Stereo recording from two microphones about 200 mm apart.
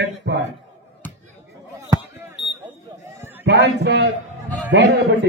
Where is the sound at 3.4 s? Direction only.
55° right (ahead or behind).